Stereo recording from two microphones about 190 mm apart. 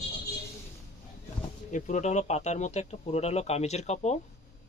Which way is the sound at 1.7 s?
40° left (ahead or behind).